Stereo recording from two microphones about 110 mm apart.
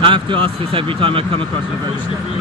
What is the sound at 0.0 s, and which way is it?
Speech, 50° right (ahead or behind).